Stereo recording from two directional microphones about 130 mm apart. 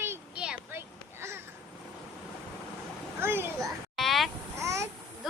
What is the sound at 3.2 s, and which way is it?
Speech, 20° right (ahead or behind).